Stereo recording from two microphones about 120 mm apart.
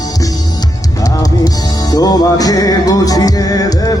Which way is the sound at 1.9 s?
35° left (ahead or behind).